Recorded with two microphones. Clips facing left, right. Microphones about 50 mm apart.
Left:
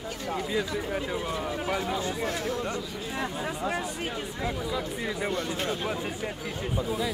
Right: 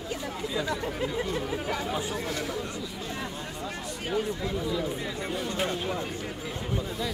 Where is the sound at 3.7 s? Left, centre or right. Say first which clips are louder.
Right 1 dB; centre.